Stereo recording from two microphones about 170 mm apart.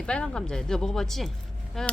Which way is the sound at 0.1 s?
5° left (ahead or behind).